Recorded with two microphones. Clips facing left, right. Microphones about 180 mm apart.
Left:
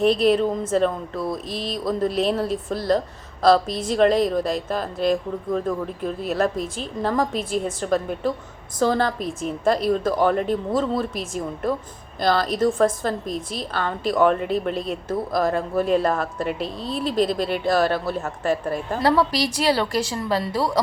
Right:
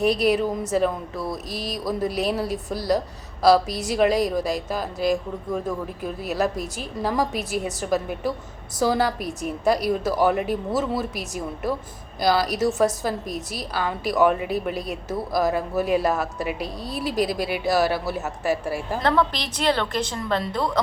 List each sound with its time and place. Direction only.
0.0 s a woman's voice: 5° right (ahead or behind)
16.6 s speech: 25° left (ahead or behind)
16.9 s speech: 5° right (ahead or behind)
19.0 s a woman's voice: 10° left (ahead or behind)